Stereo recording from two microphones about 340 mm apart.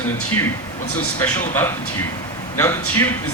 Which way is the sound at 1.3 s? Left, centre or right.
Centre.